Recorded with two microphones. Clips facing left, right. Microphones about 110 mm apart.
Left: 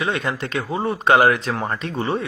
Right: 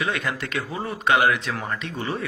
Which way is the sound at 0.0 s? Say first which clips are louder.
Left 3 dB; 30° left (ahead or behind).